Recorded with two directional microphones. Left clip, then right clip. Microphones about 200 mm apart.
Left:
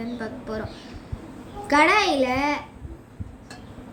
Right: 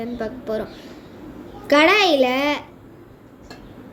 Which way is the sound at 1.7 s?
15° right (ahead or behind).